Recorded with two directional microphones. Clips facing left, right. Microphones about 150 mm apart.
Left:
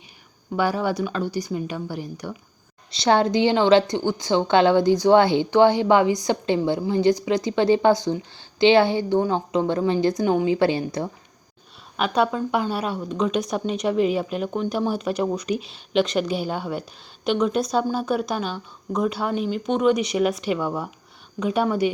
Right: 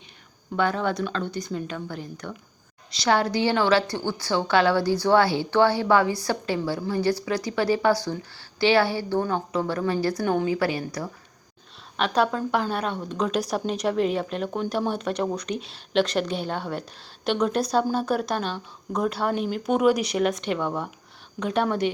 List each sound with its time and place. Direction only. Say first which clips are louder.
0.5 s speech: left 2 dB; 10° left (ahead or behind)
2.9 s a woman's voice: left 4 dB; 25° left (ahead or behind)
11.9 s a woman's voice: left 1 dB; 5° left (ahead or behind)